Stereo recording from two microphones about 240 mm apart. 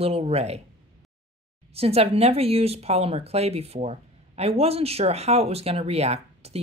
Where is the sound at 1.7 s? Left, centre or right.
Right.